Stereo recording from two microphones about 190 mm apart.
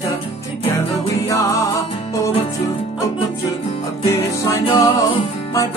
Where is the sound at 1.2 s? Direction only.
15° left (ahead or behind).